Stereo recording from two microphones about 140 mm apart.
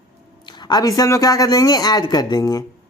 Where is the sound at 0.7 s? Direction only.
25° left (ahead or behind).